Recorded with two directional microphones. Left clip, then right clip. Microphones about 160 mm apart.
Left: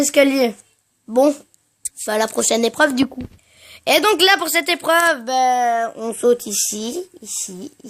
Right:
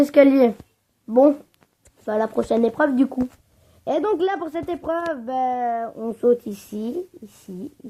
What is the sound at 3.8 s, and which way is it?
Speech, 45° left (ahead or behind).